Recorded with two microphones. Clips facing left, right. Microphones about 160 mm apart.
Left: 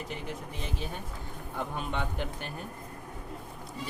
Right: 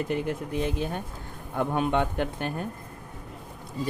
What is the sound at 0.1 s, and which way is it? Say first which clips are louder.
Speech: right 10 dB; 55° right (ahead or behind).